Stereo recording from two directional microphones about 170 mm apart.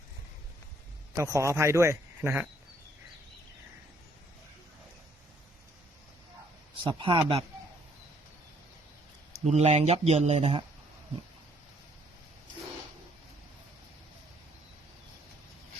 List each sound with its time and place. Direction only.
1.1 s speech: 20° right (ahead or behind)
6.8 s a man's voice: 30° right (ahead or behind)
9.4 s speech: 40° right (ahead or behind)